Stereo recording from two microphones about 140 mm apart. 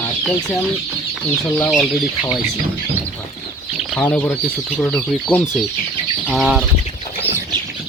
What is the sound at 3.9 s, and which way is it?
Speech, 10° left (ahead or behind).